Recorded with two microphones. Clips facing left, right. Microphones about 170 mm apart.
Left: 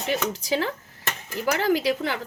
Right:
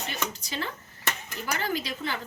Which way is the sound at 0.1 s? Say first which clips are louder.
Left 14 dB; 90° left.